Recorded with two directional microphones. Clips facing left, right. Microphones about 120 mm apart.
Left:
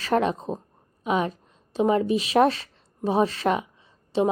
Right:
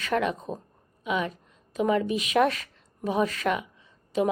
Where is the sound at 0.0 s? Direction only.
35° left (ahead or behind).